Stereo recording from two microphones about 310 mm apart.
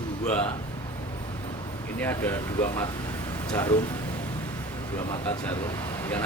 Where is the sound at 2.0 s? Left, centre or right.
Centre.